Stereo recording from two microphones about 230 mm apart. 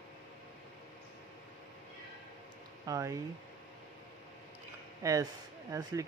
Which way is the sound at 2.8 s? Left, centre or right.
Centre.